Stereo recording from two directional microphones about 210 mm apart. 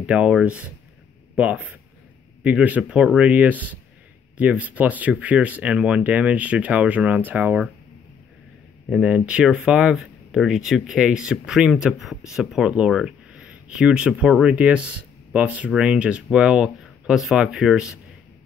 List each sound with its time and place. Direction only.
0.0 s speech: 5° right (ahead or behind)
8.9 s speech: 5° right (ahead or behind)